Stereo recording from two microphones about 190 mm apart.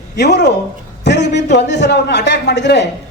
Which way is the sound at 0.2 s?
60° left (ahead or behind).